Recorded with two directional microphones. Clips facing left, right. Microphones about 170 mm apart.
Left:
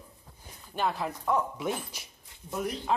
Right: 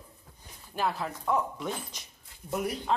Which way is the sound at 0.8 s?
Centre (ahead or behind).